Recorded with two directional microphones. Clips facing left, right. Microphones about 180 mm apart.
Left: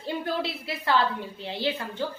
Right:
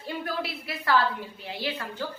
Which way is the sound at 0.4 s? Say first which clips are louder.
Left 1 dB; 25° left (ahead or behind).